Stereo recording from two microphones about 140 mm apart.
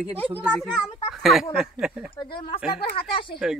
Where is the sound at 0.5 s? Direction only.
5° left (ahead or behind).